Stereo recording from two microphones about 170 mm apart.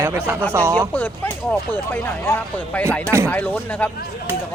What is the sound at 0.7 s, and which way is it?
Speech, 10° left (ahead or behind).